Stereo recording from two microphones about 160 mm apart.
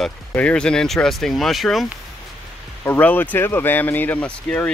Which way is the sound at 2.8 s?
10° left (ahead or behind).